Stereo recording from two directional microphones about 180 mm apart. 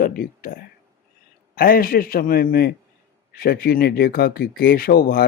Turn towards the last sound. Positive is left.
turn(degrees=55)  # may be behind; listen again after turning